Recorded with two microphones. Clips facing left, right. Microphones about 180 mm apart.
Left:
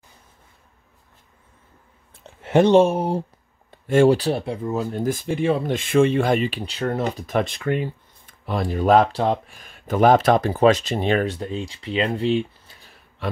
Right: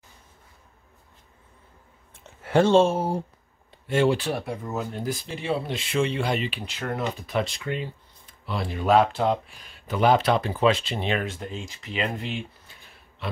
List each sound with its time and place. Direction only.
2.1 s clicking: 35° left (ahead or behind)
2.5 s speech: 15° left (ahead or behind)
3.8 s speech: 45° left (ahead or behind)
4.3 s speech: 25° left (ahead or behind)
5.0 s speech: 50° left (ahead or behind)
6.6 s speech: 30° left (ahead or behind)